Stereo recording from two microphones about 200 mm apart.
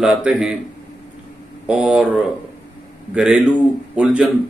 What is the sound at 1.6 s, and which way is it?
Speech, 5° right (ahead or behind).